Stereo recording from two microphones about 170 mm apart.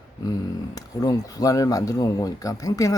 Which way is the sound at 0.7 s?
20° left (ahead or behind).